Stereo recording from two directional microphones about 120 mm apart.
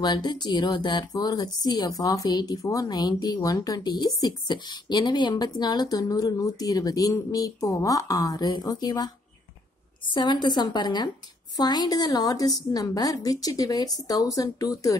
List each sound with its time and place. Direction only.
0.0 s a woman's voice: 35° left (ahead or behind)
10.1 s a woman's voice: 40° left (ahead or behind)